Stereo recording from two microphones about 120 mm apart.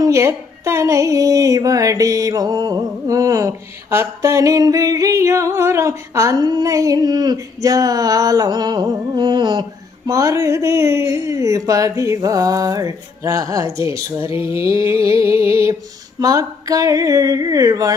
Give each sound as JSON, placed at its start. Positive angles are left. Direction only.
{"t": 0.0, "sound": "speech", "side_deg": -25}
{"t": 10.1, "sound": "speech", "side_deg": -25}